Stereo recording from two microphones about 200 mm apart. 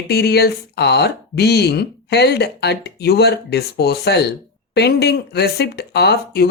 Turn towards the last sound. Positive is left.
turn(degrees=55)  # may be behind; listen again after turning